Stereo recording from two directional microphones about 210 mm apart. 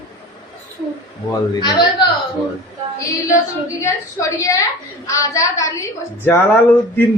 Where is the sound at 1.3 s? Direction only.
20° left (ahead or behind).